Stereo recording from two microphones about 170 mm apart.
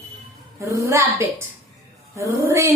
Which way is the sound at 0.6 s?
15° right (ahead or behind).